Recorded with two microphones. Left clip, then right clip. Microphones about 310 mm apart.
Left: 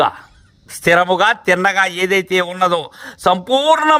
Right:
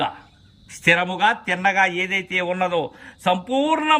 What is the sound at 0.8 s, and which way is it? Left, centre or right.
A man's voice, centre.